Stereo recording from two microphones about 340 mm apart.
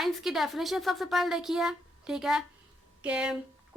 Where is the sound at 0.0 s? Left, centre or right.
Centre.